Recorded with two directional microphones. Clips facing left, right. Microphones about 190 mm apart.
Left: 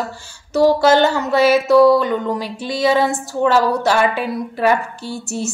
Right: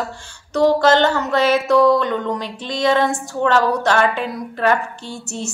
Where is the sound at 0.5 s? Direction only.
10° left (ahead or behind).